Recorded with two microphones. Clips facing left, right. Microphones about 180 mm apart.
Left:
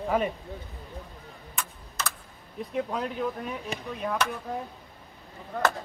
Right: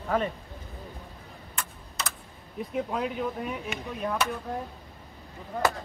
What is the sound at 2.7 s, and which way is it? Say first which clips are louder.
Speech: even; 5° right (ahead or behind).